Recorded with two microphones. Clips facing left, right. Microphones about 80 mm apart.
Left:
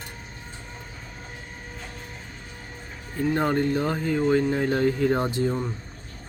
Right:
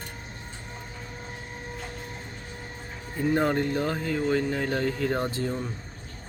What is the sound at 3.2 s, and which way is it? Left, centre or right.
Speech, centre.